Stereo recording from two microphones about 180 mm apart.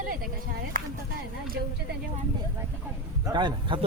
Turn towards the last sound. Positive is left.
turn(degrees=-25)  # may be behind; listen again after turning